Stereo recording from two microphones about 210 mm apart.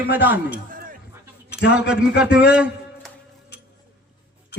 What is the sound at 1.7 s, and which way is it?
A man's voice, 5° right (ahead or behind).